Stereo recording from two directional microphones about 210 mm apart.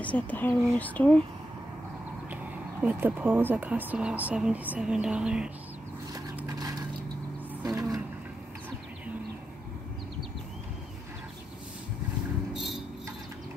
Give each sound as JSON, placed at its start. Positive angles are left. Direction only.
{"t": 0.0, "sound": "speech", "side_deg": 5}
{"t": 2.8, "sound": "speech", "side_deg": -5}
{"t": 6.1, "sound": "a sound", "side_deg": -15}
{"t": 7.6, "sound": "speech", "side_deg": -15}